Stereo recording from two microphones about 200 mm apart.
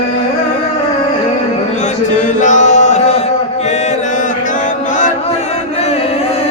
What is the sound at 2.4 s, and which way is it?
Mantra, 40° left (ahead or behind).